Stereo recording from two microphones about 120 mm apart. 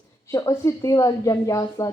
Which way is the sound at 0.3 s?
25° left (ahead or behind).